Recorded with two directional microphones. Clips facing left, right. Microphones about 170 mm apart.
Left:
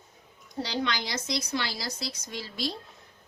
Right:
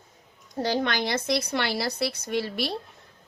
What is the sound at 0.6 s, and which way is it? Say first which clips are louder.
A woman's voice: right 5 dB; 50° right (ahead or behind).